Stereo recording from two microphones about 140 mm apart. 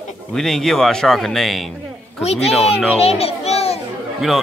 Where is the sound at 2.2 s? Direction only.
50° left (ahead or behind).